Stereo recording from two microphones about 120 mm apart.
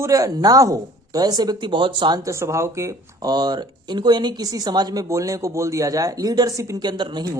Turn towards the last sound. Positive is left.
turn(degrees=-40)  # may be behind; listen again after turning